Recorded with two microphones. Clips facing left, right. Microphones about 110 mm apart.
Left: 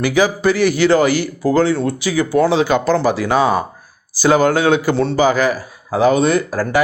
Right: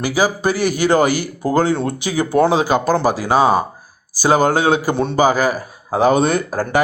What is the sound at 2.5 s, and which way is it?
Speech, 40° right (ahead or behind).